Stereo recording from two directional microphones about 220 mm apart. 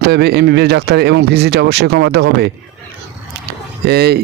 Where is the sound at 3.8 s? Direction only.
45° right (ahead or behind).